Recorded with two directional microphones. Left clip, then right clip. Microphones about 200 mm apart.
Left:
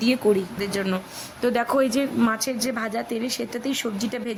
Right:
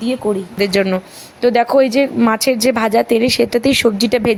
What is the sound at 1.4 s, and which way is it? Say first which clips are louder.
A woman's voice: right 10 dB; 20° right (ahead or behind).